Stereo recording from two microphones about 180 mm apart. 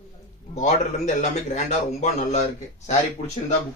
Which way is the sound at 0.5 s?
40° left (ahead or behind).